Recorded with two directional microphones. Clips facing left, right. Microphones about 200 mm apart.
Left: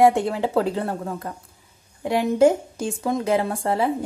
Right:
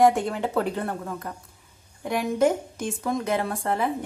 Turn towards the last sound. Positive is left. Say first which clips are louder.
# left 4 dB
turn(degrees=30)  # may be behind; listen again after turning